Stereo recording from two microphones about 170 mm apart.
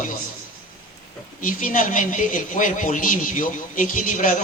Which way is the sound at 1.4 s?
50° left (ahead or behind).